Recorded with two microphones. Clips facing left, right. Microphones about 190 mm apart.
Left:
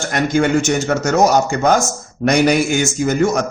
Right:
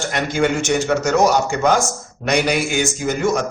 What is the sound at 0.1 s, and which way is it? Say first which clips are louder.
A man's voice: left 5 dB; 45° left (ahead or behind).